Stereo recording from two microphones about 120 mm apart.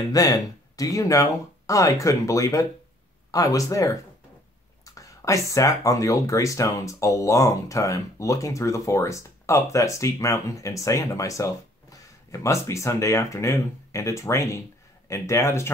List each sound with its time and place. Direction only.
0.1 s speech: 30° left (ahead or behind)